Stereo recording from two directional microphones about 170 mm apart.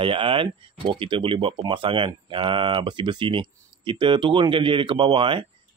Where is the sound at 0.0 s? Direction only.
30° right (ahead or behind).